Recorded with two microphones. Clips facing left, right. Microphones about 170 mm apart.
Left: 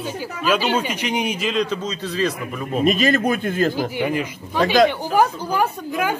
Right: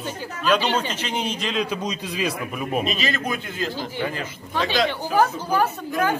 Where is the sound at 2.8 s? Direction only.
50° left (ahead or behind).